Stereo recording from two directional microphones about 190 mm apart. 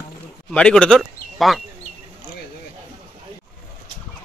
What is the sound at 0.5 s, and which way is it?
Speech, 5° left (ahead or behind).